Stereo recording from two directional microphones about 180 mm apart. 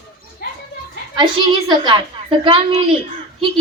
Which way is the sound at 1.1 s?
25° right (ahead or behind).